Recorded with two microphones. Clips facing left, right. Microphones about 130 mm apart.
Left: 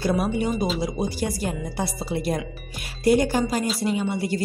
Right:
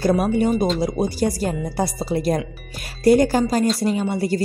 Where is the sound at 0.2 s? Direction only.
45° right (ahead or behind).